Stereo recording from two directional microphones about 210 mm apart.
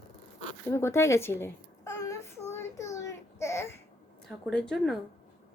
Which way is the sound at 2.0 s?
15° left (ahead or behind).